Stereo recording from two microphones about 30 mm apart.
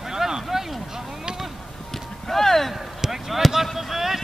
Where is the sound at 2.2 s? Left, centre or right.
Centre.